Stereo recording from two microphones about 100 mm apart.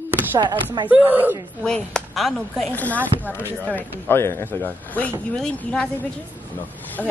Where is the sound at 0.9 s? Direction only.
15° right (ahead or behind).